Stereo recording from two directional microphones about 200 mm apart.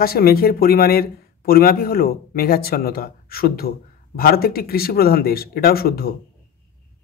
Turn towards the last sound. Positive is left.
turn(degrees=50)  # may be behind; listen again after turning